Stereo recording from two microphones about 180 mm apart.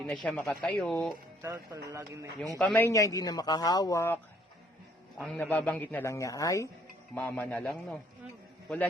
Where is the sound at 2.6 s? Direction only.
10° left (ahead or behind).